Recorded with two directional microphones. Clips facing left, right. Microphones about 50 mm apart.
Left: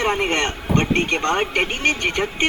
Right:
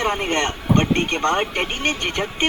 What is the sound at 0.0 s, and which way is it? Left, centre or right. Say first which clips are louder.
Speech: left 1 dB; left.